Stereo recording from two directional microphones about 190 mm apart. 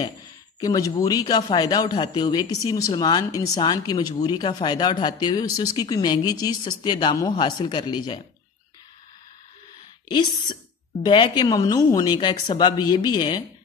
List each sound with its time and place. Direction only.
0.6 s a man's voice: 20° left (ahead or behind)
11.0 s a man's voice: 25° left (ahead or behind)